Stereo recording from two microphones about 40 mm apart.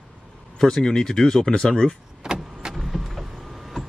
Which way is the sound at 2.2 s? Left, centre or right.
Centre.